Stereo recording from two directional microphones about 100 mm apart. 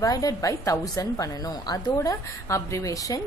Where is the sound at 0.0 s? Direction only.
35° left (ahead or behind).